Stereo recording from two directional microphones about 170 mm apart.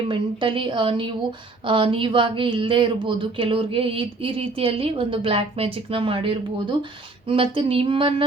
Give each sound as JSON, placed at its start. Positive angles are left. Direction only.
{"t": 0.1, "sound": "speech", "side_deg": -30}